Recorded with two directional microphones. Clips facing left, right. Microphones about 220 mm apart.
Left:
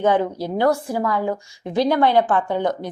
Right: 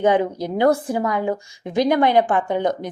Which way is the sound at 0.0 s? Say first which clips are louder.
Right 1 dB; 15° right (ahead or behind).